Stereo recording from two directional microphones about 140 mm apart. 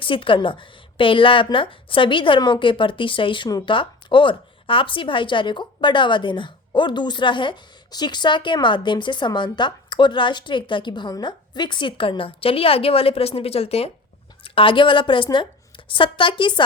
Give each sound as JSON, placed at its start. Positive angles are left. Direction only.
{"t": 0.0, "sound": "a woman's voice", "side_deg": 40}